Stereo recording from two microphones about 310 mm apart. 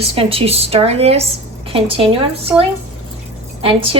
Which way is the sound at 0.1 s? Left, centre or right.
Centre.